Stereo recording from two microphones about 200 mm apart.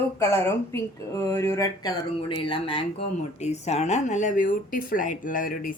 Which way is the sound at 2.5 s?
25° left (ahead or behind).